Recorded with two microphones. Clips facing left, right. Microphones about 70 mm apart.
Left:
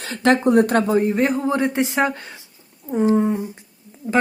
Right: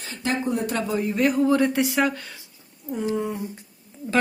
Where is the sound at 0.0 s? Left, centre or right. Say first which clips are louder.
Left 9 dB; left.